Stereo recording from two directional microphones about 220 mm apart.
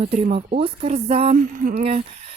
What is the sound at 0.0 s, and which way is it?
Speech, 30° right (ahead or behind).